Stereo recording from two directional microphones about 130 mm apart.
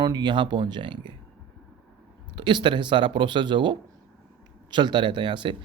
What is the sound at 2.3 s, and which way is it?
A man's voice, 40° right (ahead or behind).